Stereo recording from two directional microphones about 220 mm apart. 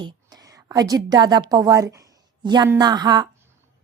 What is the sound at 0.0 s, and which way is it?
A woman's voice, 20° right (ahead or behind).